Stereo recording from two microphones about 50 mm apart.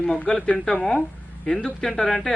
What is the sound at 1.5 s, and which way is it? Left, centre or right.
Speech, centre.